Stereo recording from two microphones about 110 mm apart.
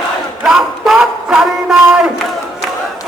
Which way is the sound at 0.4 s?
5° right (ahead or behind).